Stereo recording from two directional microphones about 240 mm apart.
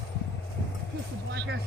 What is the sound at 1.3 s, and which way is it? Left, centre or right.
Music, right.